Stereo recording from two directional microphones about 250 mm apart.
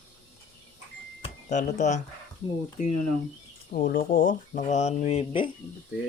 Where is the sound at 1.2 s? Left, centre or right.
Left.